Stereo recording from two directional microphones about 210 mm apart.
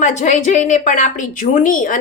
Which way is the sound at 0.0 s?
35° left (ahead or behind).